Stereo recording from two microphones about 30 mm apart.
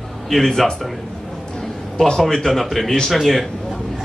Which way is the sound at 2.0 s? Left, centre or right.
Centre.